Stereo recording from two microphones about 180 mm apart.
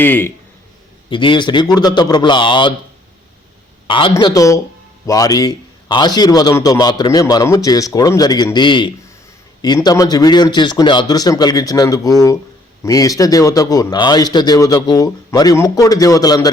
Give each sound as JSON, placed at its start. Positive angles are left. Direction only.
{"t": 0.0, "sound": "speech", "side_deg": 10}
{"t": 1.1, "sound": "a man's voice", "side_deg": 25}
{"t": 3.8, "sound": "a man's voice", "side_deg": 30}